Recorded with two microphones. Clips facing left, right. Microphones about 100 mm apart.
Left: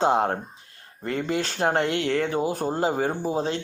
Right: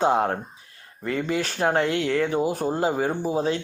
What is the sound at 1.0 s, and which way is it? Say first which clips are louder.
Speech: right 1 dB; 40° left (ahead or behind).